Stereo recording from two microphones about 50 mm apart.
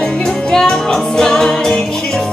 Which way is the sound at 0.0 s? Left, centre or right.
Centre.